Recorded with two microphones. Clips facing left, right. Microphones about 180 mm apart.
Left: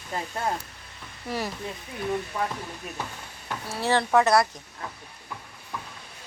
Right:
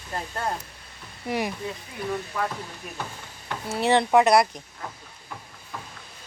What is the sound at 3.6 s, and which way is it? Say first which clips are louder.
Speech: right 4 dB; 20° right (ahead or behind).